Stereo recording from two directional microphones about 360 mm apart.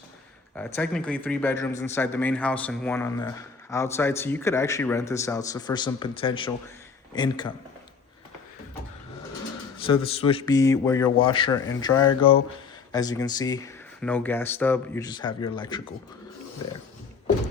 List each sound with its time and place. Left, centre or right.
0.5 s speech: centre
9.7 s speech: centre